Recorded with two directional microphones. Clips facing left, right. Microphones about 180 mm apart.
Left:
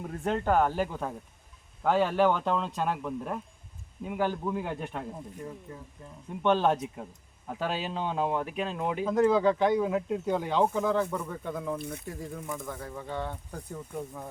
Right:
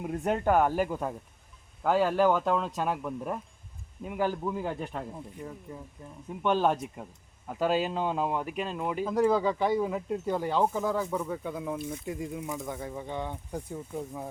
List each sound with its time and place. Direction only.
0.0 s speech: 10° right (ahead or behind)
6.4 s speech: 10° right (ahead or behind)
12.0 s speech: 20° right (ahead or behind)